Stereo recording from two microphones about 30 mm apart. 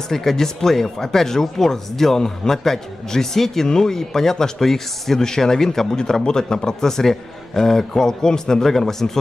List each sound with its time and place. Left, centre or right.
0.1 s a man's voice: centre